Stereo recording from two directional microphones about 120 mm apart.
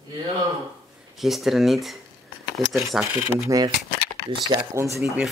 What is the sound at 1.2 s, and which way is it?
Speech, centre (ahead or behind).